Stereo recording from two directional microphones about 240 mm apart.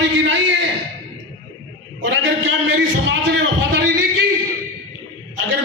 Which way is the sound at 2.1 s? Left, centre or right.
Right.